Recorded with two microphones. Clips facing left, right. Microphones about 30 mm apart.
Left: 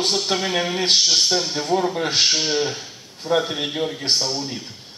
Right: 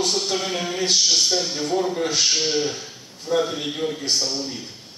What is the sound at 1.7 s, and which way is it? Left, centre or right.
Speech, left.